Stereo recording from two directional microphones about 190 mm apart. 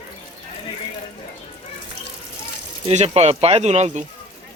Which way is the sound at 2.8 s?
35° right (ahead or behind).